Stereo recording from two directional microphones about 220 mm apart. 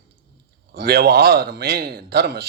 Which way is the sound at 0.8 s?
45° right (ahead or behind).